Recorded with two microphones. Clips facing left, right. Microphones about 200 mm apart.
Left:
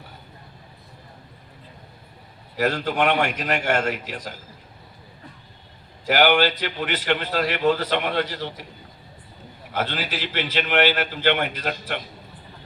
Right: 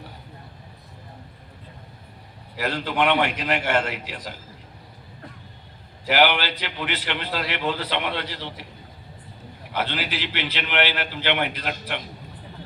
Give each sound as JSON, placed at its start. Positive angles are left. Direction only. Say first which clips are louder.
{"t": 2.6, "sound": "a man's voice", "louder": "left 2 dB", "side_deg": 45}
{"t": 6.1, "sound": "a man's voice", "louder": "left 3 dB", "side_deg": 45}
{"t": 9.7, "sound": "a man's voice", "louder": "left 1 dB", "side_deg": 45}